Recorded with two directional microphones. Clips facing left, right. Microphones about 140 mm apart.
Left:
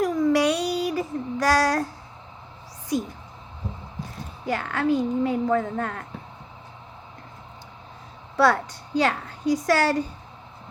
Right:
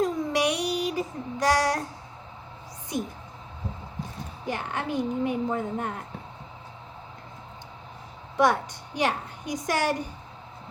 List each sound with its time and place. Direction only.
0.0 s child singing: 20° right (ahead or behind)
2.9 s a woman's voice: 20° right (ahead or behind)
4.4 s a woman's voice: 20° right (ahead or behind)
9.0 s a woman's voice: 20° right (ahead or behind)